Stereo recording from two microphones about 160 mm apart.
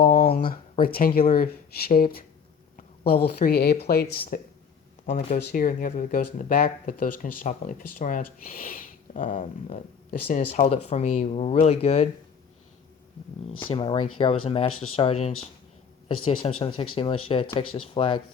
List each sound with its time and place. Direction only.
0.0 s a sound: 60° left (ahead or behind)
1.3 s speech: 70° left (ahead or behind); by 12.0 s 40° left (ahead or behind)
13.6 s speech: 35° left (ahead or behind)